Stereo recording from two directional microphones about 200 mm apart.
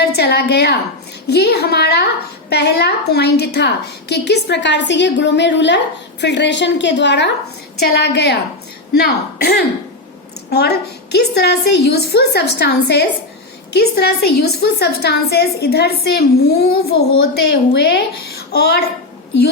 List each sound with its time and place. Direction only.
0.0 s a woman's voice: 55° left (ahead or behind)